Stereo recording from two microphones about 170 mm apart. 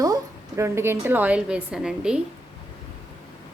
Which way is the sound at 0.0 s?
20° right (ahead or behind).